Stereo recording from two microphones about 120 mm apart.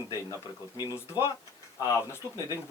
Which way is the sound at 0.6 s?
35° left (ahead or behind).